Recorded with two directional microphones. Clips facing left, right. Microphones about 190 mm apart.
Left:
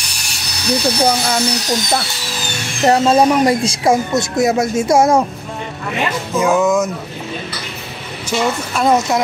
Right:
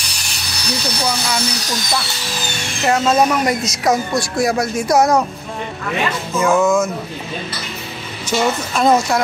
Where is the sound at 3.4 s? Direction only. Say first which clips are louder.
Left 4 dB; 30° left (ahead or behind).